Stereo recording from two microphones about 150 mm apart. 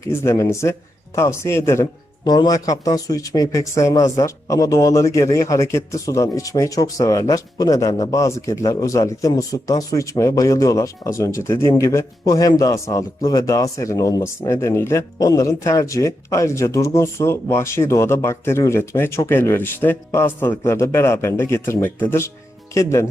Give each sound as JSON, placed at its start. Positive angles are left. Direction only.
{"t": 0.0, "sound": "speech", "side_deg": 20}